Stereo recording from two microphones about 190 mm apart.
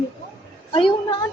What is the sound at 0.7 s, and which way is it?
Speech, 25° left (ahead or behind).